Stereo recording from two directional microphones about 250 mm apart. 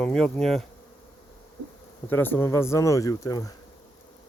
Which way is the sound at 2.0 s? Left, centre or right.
Centre.